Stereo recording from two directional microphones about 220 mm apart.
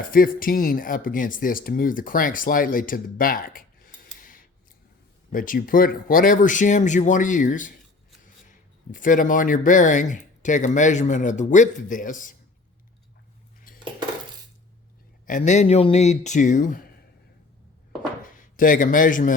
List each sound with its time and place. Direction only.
0.1 s speech: 40° left (ahead or behind)
8.9 s speech: 35° left (ahead or behind)
15.3 s speech: 35° left (ahead or behind)
18.2 s speech: 35° left (ahead or behind)